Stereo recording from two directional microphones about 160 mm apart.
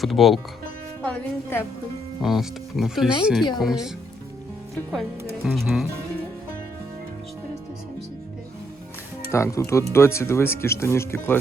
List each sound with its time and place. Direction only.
0.0 s speech: centre (ahead or behind)
1.0 s speech: 10° left (ahead or behind)
2.2 s speech: centre (ahead or behind)
5.5 s speech: centre (ahead or behind)
9.3 s speech: 20° left (ahead or behind)